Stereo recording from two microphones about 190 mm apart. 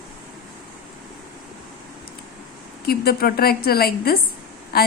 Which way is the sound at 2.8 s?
55° left (ahead or behind).